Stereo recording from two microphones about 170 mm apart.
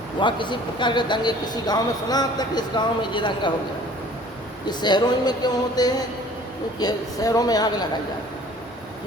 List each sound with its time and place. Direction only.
0.2 s speech: 30° left (ahead or behind)
4.6 s speech: 25° left (ahead or behind)